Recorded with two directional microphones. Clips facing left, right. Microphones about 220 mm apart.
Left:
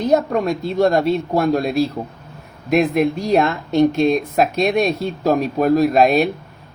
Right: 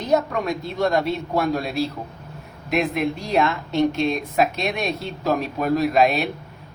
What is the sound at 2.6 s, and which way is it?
Speech, 45° left (ahead or behind).